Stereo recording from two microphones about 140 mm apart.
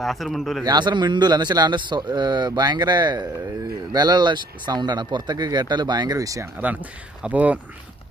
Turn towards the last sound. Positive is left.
turn(degrees=-10)  # may be behind; listen again after turning